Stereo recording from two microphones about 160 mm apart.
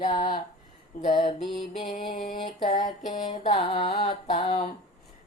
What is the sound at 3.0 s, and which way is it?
Speech, 50° left (ahead or behind).